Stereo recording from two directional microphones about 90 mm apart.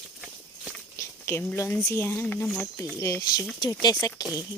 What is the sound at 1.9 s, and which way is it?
Speech, 30° left (ahead or behind).